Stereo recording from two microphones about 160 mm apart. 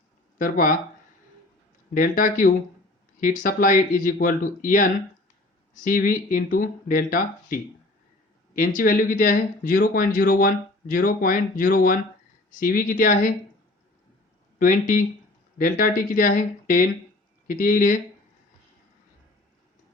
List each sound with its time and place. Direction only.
0.3 s speech: 60° left (ahead or behind)
1.9 s speech: 60° left (ahead or behind)
14.6 s speech: 55° left (ahead or behind)